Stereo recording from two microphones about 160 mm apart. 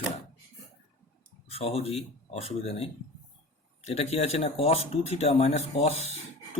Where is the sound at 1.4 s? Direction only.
40° left (ahead or behind).